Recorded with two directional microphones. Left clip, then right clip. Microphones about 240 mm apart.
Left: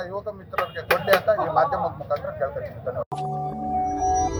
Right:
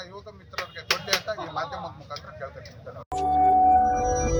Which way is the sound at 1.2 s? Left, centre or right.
Centre.